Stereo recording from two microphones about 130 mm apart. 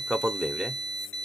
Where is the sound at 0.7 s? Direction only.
30° right (ahead or behind).